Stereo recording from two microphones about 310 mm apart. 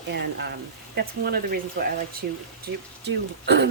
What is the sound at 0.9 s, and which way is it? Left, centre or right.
Speech, right.